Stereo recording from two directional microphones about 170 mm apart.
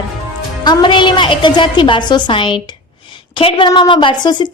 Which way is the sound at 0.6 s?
25° left (ahead or behind).